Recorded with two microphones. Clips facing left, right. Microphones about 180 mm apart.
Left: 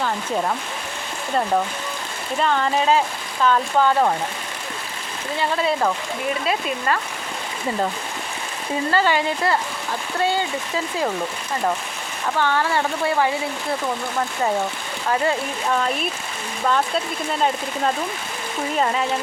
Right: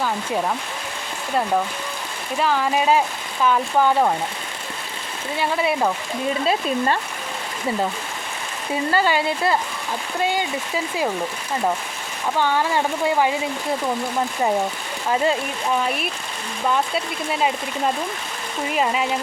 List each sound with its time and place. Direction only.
2.4 s speech: 5° right (ahead or behind)
5.4 s speech: 10° right (ahead or behind)
6.5 s speech: 30° right (ahead or behind)
8.9 s speech: 15° right (ahead or behind)
12.4 s speech: 15° right (ahead or behind)
15.1 s speech: 15° right (ahead or behind)
18.8 s speech: 10° right (ahead or behind)